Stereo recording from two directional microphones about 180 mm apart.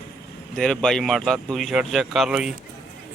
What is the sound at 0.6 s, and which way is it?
Speech, centre (ahead or behind).